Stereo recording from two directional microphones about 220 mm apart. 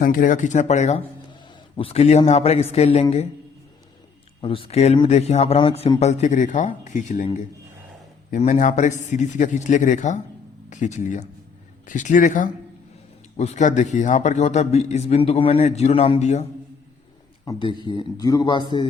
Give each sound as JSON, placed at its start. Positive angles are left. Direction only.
{"t": 0.0, "sound": "a man's voice", "side_deg": 40}
{"t": 4.4, "sound": "a man's voice", "side_deg": 25}
{"t": 17.4, "sound": "speech", "side_deg": 20}